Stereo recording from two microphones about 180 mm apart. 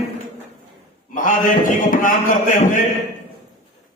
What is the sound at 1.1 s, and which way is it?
Speech, 50° left (ahead or behind).